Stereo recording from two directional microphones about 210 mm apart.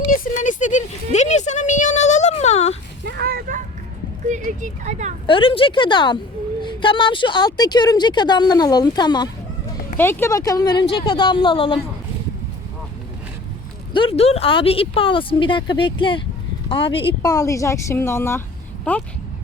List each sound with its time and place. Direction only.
0.1 s speech: 35° left (ahead or behind)
3.0 s a sound: 50° right (ahead or behind)
4.3 s speech: 35° right (ahead or behind)
5.2 s a woman's voice: 25° left (ahead or behind)
13.9 s a woman's voice: 25° left (ahead or behind); by 19.0 s 5° left (ahead or behind)